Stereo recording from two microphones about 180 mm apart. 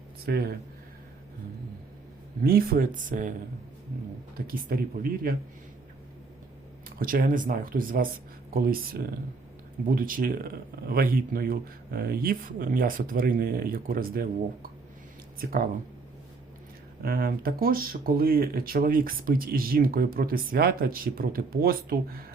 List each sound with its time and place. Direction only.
0.3 s speech: 60° right (ahead or behind)
2.4 s speech: 55° right (ahead or behind)
4.4 s speech: 55° right (ahead or behind)
7.0 s speech: 50° right (ahead or behind)
15.4 s speech: 55° right (ahead or behind)
17.0 s speech: 55° right (ahead or behind)